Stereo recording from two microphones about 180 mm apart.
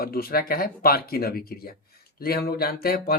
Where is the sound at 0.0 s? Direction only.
55° left (ahead or behind).